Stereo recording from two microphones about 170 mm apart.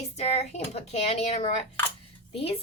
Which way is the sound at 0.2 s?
40° left (ahead or behind).